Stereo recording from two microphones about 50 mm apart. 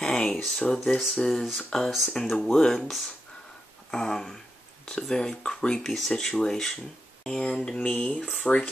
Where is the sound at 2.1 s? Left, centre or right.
Centre.